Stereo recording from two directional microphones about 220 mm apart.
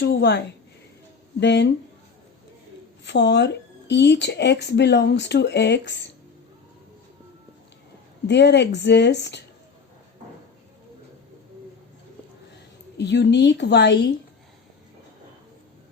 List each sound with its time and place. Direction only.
0.0 s a woman's voice: 50° left (ahead or behind)
3.0 s speech: 55° left (ahead or behind)
8.3 s speech: 50° left (ahead or behind)
13.0 s speech: 55° left (ahead or behind)